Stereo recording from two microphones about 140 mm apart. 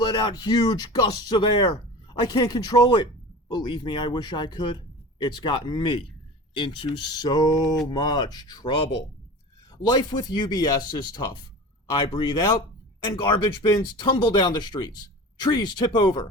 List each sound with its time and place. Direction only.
0.0 s speech: 35° left (ahead or behind)
9.8 s speech: 30° left (ahead or behind)